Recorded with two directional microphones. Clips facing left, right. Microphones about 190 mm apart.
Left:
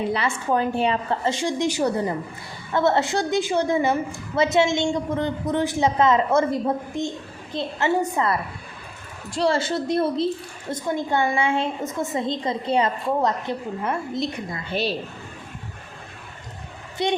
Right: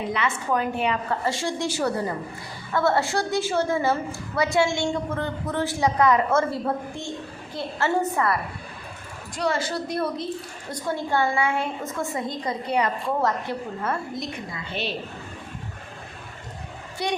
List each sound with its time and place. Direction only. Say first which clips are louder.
0.1 s a woman's voice: left 2 dB; 30° left (ahead or behind)
14.5 s a woman's voice: left 4 dB; 35° left (ahead or behind)
17.0 s a woman's voice: left 4 dB; 20° left (ahead or behind)